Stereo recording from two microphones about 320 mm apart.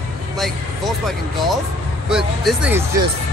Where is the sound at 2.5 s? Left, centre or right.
Centre.